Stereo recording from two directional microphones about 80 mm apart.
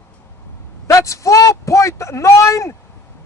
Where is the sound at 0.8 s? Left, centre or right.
Left.